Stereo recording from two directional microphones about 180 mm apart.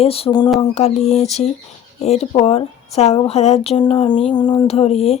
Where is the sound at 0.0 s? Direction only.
30° left (ahead or behind).